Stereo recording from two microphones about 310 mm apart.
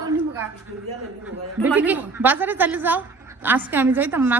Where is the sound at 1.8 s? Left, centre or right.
Centre.